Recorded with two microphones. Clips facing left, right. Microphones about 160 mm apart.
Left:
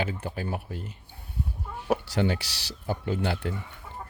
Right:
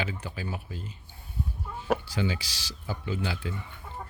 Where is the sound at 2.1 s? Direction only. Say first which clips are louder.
Left 4 dB; 65° left (ahead or behind).